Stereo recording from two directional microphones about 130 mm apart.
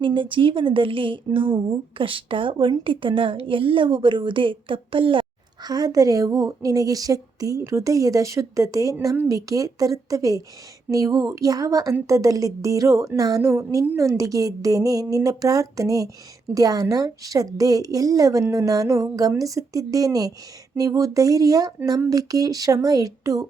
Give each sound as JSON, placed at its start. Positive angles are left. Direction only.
{"t": 0.0, "sound": "a woman's voice", "side_deg": -40}
{"t": 5.6, "sound": "speech", "side_deg": -30}